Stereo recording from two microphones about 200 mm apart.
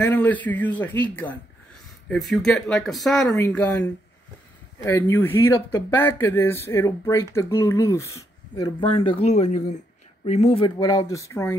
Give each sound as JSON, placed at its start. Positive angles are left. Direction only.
{"t": 0.0, "sound": "speech", "side_deg": 10}